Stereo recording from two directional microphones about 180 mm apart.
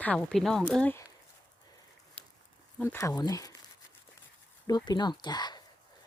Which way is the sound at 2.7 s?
15° left (ahead or behind).